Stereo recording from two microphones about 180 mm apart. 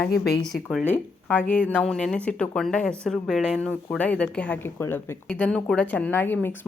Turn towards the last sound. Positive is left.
turn(degrees=10)  # may be behind; listen again after turning